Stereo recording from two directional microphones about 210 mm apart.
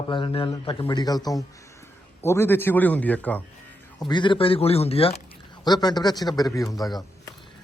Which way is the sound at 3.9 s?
20° left (ahead or behind).